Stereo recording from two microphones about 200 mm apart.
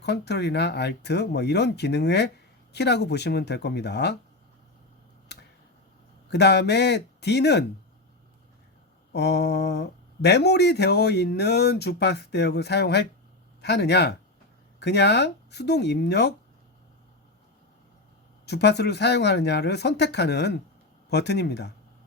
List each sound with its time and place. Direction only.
0.0 s speech: 55° left (ahead or behind)
5.3 s a sound: 55° left (ahead or behind)
6.3 s speech: 55° left (ahead or behind)
9.1 s speech: 55° left (ahead or behind)
18.4 s speech: 55° left (ahead or behind)